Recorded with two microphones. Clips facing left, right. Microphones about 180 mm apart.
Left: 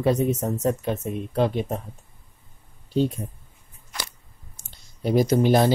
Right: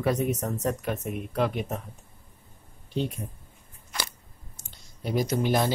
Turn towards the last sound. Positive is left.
turn(degrees=30)  # may be behind; listen again after turning